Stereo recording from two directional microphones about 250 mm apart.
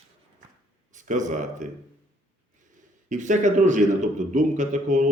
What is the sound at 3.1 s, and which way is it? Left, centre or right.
A man's voice, right.